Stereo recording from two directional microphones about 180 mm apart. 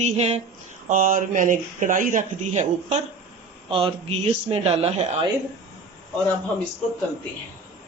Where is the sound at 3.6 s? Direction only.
30° right (ahead or behind).